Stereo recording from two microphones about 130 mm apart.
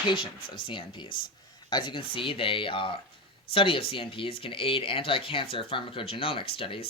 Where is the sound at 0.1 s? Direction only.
40° left (ahead or behind).